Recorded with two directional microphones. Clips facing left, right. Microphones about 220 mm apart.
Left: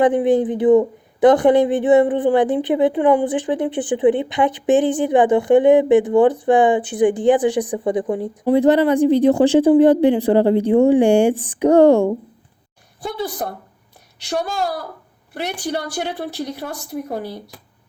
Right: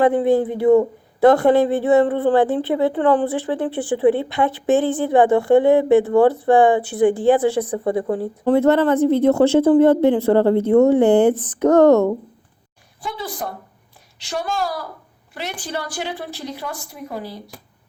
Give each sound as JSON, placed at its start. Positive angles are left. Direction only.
{"t": 0.0, "sound": "a man's voice", "side_deg": 15}
{"t": 15.6, "sound": "a woman's voice", "side_deg": 65}